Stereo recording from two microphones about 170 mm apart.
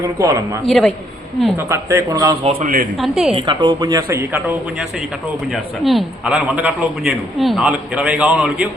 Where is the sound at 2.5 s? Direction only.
50° right (ahead or behind).